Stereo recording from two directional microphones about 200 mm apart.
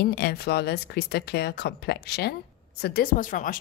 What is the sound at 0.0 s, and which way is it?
A woman's voice, 50° left (ahead or behind).